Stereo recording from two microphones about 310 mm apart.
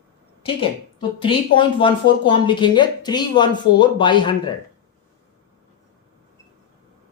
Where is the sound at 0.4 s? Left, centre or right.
Centre.